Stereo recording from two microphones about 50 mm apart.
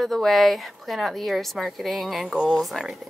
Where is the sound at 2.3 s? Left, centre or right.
Centre.